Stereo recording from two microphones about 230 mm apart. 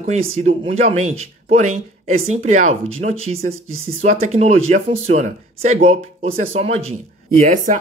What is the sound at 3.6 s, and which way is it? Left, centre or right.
Speech, right.